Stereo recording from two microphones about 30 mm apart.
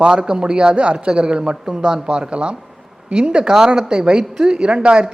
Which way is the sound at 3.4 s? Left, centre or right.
Centre.